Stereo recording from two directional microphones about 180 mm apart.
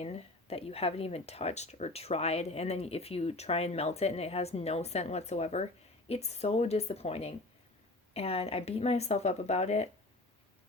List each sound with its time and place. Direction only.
0.0 s speech: 35° left (ahead or behind)